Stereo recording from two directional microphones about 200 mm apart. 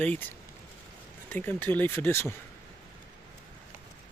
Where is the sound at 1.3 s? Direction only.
10° left (ahead or behind).